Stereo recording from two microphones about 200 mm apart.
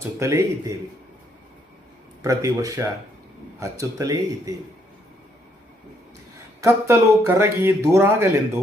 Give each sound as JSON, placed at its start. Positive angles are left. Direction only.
{"t": 0.0, "sound": "speech", "side_deg": -15}
{"t": 2.2, "sound": "speech", "side_deg": -15}
{"t": 6.6, "sound": "speech", "side_deg": -15}